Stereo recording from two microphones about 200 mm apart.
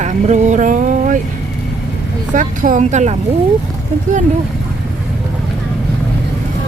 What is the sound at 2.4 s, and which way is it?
Speech, 40° right (ahead or behind).